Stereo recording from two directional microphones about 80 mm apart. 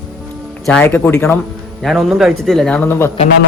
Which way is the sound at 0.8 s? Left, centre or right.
Left.